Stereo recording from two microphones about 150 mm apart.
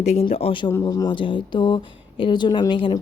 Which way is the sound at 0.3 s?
35° left (ahead or behind).